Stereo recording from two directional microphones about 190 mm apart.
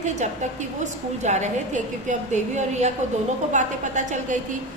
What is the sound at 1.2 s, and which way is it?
A woman's voice, 40° right (ahead or behind).